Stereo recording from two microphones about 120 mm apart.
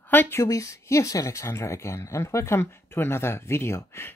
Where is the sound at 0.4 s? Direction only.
25° left (ahead or behind).